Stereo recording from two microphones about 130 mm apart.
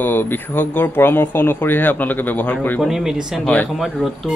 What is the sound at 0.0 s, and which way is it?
Speech, 15° left (ahead or behind).